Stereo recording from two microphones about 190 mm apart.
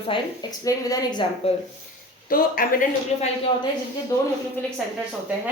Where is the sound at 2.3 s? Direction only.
50° left (ahead or behind).